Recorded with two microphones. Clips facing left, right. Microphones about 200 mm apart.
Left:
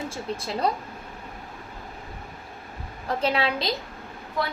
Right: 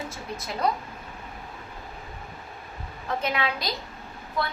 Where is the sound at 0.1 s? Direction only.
30° left (ahead or behind).